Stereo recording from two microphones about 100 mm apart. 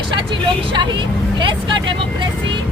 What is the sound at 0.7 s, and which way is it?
A woman's voice, 50° right (ahead or behind).